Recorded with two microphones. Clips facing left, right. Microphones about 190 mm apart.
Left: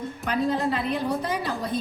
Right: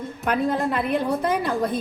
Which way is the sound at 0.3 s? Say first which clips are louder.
Right 2 dB; 55° right (ahead or behind).